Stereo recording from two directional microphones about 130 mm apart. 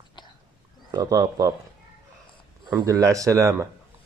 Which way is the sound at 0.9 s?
30° right (ahead or behind).